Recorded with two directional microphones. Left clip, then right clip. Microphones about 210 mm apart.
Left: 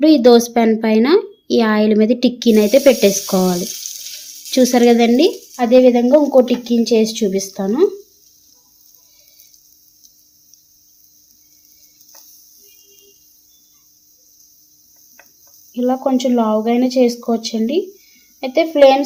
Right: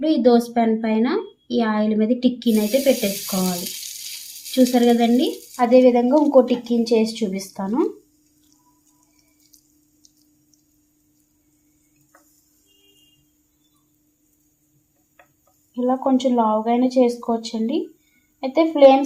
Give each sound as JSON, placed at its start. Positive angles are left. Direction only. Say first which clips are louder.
{"t": 0.0, "sound": "a woman's voice", "louder": "left 7 dB", "side_deg": 45}
{"t": 4.5, "sound": "a woman's voice", "louder": "left 5 dB", "side_deg": 45}
{"t": 5.5, "sound": "speech", "louder": "left 3 dB", "side_deg": 25}
{"t": 15.7, "sound": "speech", "louder": "left 3 dB", "side_deg": 35}